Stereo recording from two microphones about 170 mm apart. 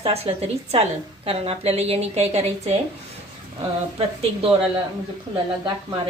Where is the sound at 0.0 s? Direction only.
35° right (ahead or behind).